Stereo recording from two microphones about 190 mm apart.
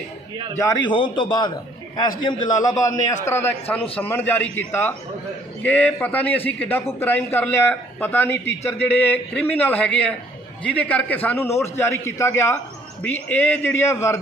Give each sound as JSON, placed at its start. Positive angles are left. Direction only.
{"t": 0.6, "sound": "a man's voice", "side_deg": 25}